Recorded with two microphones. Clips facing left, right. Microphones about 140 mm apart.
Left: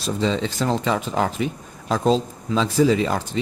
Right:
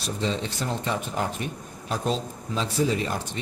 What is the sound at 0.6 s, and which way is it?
Speech, 90° left.